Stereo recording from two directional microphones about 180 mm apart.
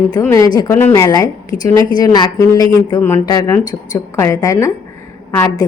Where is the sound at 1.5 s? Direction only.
45° left (ahead or behind).